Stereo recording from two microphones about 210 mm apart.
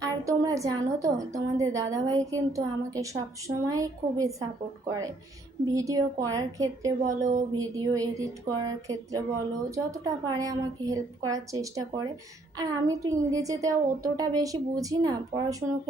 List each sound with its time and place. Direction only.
0.0 s a woman's voice: 15° right (ahead or behind)
5.7 s a woman's voice: 15° right (ahead or behind)
7.0 s speech: 35° right (ahead or behind)
7.6 s a woman's voice: 15° right (ahead or behind)